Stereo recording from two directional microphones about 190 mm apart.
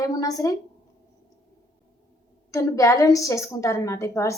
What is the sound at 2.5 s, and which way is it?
A woman's voice, 15° left (ahead or behind).